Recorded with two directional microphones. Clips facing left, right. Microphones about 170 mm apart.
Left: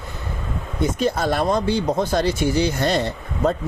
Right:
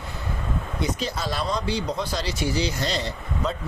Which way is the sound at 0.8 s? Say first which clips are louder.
Left 9 dB; 50° left (ahead or behind).